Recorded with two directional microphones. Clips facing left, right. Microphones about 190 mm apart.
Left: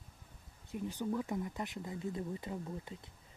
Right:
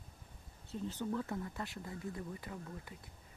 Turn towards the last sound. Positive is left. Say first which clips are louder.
# left 5 dB
turn(degrees=25)  # may be behind; listen again after turning